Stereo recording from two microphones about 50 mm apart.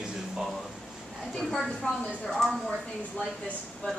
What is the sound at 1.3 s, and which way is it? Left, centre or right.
A man's voice, centre.